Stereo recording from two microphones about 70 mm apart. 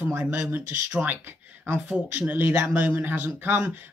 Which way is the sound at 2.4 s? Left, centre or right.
Right.